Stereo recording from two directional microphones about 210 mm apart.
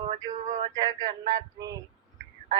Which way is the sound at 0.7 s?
20° right (ahead or behind).